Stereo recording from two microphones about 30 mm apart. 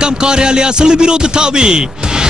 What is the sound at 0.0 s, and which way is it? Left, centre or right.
Speech, right.